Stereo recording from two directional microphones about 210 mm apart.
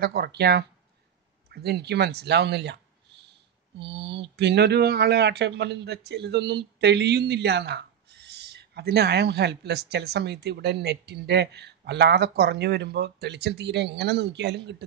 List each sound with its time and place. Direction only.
0.0 s speech: 45° right (ahead or behind)